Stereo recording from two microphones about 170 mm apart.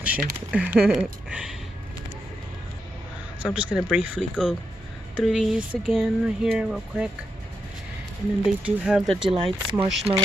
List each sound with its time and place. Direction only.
0.0 s speech: 10° right (ahead or behind)
3.5 s speech: 5° right (ahead or behind)
8.6 s speech: 5° right (ahead or behind)
9.3 s speech: 35° right (ahead or behind)